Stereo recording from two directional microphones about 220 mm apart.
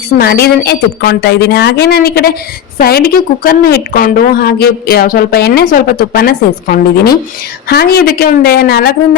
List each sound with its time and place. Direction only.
0.2 s a woman's voice: 45° left (ahead or behind)